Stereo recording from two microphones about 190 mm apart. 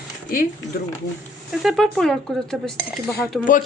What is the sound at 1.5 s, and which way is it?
Speech, centre (ahead or behind).